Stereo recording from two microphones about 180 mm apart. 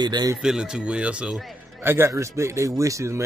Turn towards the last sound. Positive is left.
turn(degrees=-15)  # may be behind; listen again after turning